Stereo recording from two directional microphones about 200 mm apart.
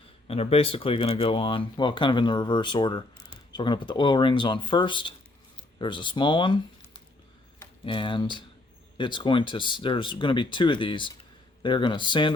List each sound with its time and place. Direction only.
0.3 s speech: 30° left (ahead or behind)
7.9 s speech: 25° left (ahead or behind)